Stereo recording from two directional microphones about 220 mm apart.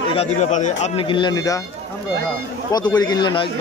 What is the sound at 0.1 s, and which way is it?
Speech, 30° left (ahead or behind).